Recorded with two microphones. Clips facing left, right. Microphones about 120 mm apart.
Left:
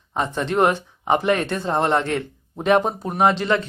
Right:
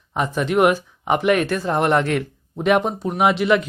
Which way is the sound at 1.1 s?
30° left (ahead or behind).